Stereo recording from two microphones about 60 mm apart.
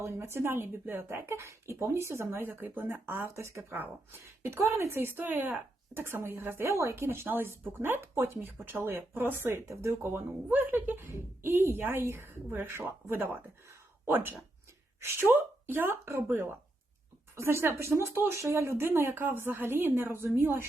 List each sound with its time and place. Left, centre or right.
0.0 s speech: right
10.5 s speech: right
14.1 s speech: right